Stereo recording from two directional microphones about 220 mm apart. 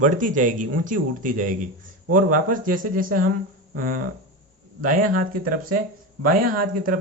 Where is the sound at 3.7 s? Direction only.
40° right (ahead or behind).